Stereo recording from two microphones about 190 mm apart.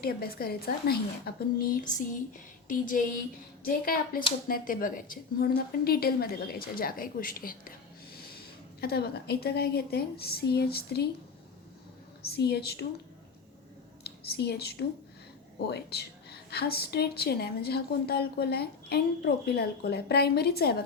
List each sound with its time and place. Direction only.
0.0 s a woman's voice: 55° left (ahead or behind)
1.7 s a woman's voice: 40° left (ahead or behind)
8.8 s a woman's voice: 55° left (ahead or behind)
12.2 s a woman's voice: 60° left (ahead or behind)
14.0 s a woman's voice: 60° left (ahead or behind)